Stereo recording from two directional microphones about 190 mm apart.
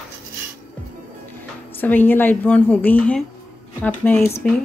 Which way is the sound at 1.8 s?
10° left (ahead or behind).